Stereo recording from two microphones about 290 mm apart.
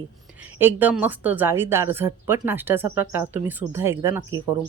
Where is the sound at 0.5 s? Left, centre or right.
Centre.